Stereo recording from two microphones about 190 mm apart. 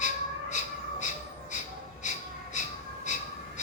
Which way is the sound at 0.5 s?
40° left (ahead or behind).